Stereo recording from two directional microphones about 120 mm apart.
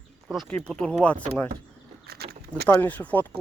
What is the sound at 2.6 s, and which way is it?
Speech, 15° left (ahead or behind).